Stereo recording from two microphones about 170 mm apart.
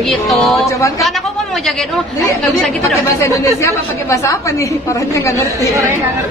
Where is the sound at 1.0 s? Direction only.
Centre (ahead or behind).